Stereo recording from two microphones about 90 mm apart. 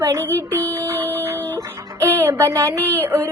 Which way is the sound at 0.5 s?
35° right (ahead or behind).